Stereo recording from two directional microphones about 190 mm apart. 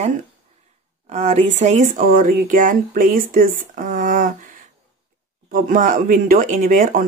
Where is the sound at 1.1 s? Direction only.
35° right (ahead or behind).